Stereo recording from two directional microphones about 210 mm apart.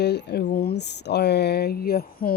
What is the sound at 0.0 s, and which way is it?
Speech, 50° left (ahead or behind).